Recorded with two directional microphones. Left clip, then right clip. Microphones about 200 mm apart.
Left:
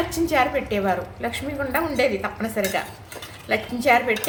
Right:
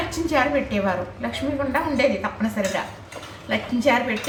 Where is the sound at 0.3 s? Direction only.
25° left (ahead or behind).